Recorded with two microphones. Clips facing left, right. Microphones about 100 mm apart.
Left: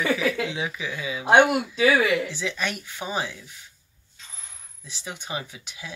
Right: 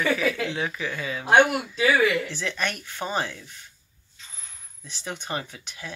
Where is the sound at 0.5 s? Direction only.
10° left (ahead or behind).